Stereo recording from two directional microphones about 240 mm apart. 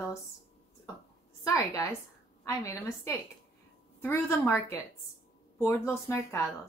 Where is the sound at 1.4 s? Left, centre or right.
Centre.